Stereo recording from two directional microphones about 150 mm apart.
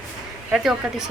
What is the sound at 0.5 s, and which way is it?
Speech, 5° right (ahead or behind).